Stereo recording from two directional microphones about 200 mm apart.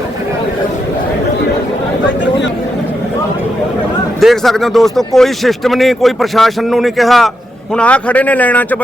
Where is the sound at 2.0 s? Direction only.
65° left (ahead or behind).